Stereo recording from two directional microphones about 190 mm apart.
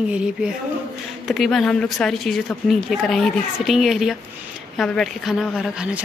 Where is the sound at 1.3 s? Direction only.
Centre (ahead or behind).